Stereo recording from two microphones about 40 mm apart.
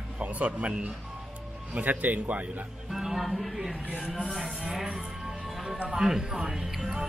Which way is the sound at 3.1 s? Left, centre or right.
Centre.